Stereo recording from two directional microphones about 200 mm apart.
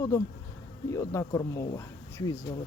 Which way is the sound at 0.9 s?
15° left (ahead or behind).